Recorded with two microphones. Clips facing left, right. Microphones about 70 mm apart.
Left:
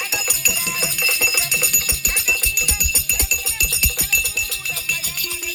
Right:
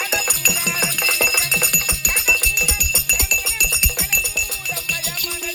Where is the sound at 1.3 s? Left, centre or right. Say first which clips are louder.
Right 2 dB; right.